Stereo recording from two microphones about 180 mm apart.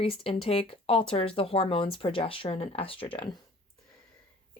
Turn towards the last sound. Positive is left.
turn(degrees=30)  # may be behind; listen again after turning